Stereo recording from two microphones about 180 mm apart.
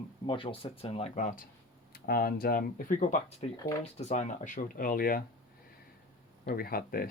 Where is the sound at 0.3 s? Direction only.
25° left (ahead or behind); by 1.5 s 45° left (ahead or behind).